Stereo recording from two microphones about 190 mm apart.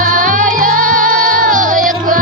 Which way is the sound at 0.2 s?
45° right (ahead or behind).